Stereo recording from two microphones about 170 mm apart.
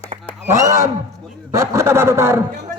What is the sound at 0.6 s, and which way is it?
Speech, 20° right (ahead or behind).